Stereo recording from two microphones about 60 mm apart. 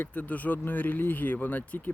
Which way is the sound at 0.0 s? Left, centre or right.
Left.